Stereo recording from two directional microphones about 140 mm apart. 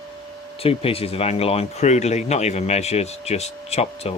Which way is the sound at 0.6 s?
45° left (ahead or behind).